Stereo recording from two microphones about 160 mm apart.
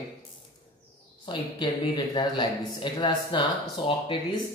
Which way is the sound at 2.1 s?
30° left (ahead or behind).